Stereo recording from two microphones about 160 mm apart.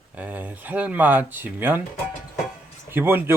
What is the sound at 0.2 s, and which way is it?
Speech, 10° right (ahead or behind).